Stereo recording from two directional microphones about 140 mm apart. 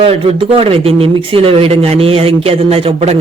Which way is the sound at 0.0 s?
45° right (ahead or behind).